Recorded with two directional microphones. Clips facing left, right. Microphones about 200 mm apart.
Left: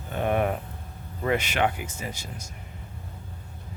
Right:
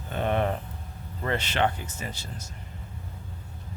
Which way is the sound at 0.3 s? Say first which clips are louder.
Left 2 dB; 10° left (ahead or behind).